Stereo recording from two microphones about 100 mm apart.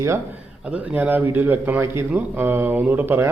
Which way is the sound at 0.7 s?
15° right (ahead or behind).